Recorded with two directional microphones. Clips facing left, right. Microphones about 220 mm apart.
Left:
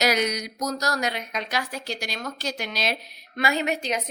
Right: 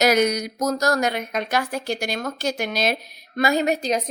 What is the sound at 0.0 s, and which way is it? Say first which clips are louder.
A woman's voice: right 6 dB; 50° right (ahead or behind).